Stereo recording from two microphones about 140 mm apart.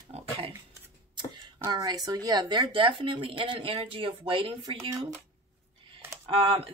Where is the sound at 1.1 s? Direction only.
30° right (ahead or behind).